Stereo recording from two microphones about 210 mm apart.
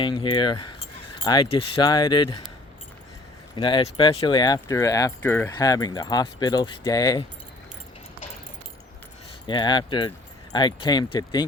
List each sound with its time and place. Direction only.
0.0 s speech: 20° left (ahead or behind)
3.5 s speech: 20° left (ahead or behind)
9.5 s speech: 20° left (ahead or behind)